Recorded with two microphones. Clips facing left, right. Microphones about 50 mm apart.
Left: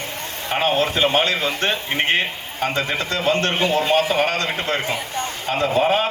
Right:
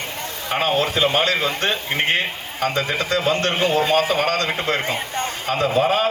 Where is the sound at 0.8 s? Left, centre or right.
Left.